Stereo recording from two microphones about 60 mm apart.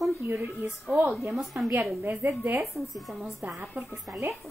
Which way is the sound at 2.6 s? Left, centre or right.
Centre.